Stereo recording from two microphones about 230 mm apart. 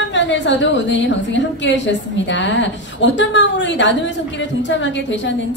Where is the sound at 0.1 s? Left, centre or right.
Left.